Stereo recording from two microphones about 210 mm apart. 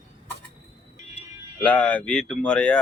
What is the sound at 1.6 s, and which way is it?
Speech, 5° left (ahead or behind).